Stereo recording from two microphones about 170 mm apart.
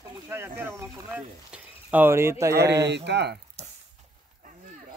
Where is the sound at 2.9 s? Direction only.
85° right.